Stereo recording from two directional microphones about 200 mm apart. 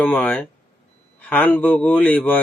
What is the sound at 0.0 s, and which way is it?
Speech, 10° left (ahead or behind).